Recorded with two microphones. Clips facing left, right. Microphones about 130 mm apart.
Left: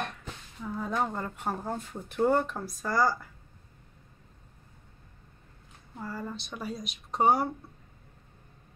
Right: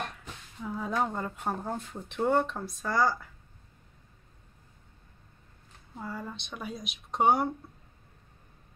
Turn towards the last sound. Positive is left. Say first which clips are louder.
# even
turn(degrees=0)  # may be behind; listen again after turning